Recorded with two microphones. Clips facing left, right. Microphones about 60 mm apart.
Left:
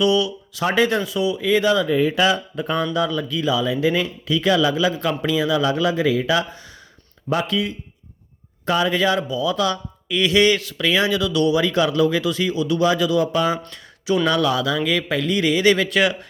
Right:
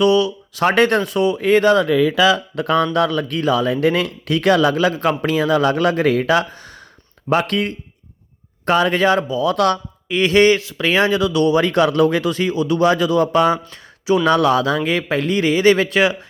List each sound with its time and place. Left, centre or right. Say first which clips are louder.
0.0 s speech: right 4 dB; right
0.6 s speech: right 4 dB; right
2.6 s speech: right 6 dB; right
2.8 s speech: right 4 dB; right
7.3 s speech: right 4 dB; right
9.5 s speech: right 6 dB; right
10.1 s speech: right 4 dB; right
10.6 s speech: right 2 dB; right
10.8 s speech: right 3 dB; right